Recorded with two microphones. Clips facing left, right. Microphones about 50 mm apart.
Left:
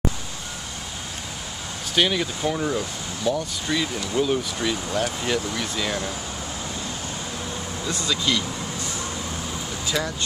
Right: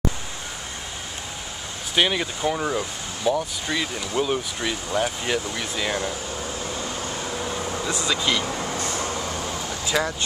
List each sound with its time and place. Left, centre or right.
2.0 s speech: centre
8.1 s speech: centre
8.7 s vehicle: right
9.8 s speech: centre